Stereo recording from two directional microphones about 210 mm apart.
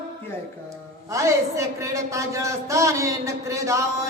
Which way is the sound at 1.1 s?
15° right (ahead or behind).